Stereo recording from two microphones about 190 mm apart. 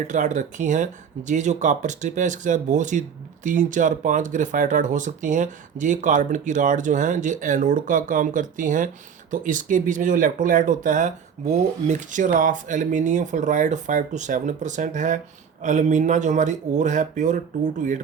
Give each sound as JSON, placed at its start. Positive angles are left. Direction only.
{"t": 0.1, "sound": "speech", "side_deg": -40}